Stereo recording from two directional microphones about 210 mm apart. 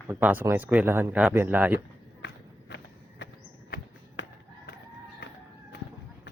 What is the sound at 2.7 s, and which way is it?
Run, 55° left (ahead or behind).